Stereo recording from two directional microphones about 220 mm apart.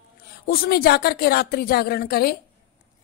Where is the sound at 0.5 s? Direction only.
40° left (ahead or behind).